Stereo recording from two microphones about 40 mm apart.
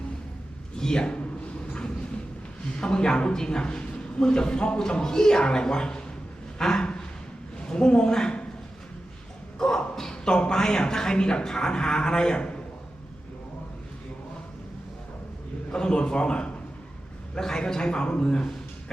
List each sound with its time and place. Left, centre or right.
0.8 s a sound: centre
2.7 s a man's voice: left
6.6 s a sound: centre
7.6 s a woman's voice: left
9.6 s a man's voice: centre
15.7 s a man's voice: centre
17.4 s a man's voice: centre